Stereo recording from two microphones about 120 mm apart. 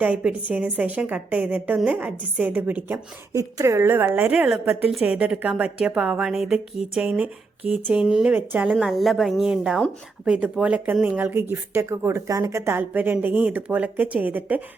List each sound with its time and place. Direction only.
0.0 s speech: 10° right (ahead or behind)
3.3 s speech: 25° right (ahead or behind)
8.9 s a woman's voice: centre (ahead or behind)